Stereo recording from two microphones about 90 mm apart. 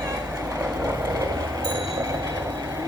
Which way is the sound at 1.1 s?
40° right (ahead or behind).